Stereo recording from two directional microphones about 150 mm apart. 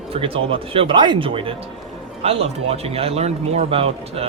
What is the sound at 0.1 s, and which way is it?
Speech, 35° right (ahead or behind).